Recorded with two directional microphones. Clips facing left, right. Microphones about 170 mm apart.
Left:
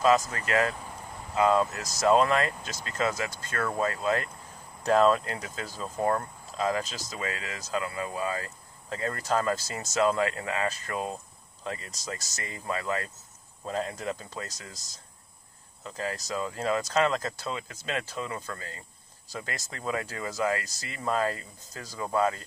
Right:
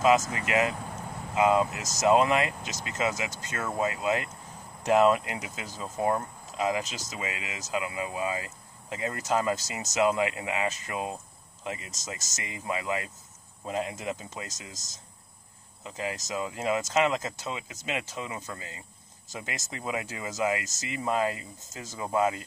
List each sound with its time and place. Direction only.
0.3 s speech: 15° right (ahead or behind)
15.8 s speech: 15° right (ahead or behind)